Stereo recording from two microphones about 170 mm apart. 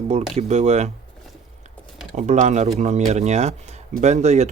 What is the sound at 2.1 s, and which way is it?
Speech, 45° right (ahead or behind).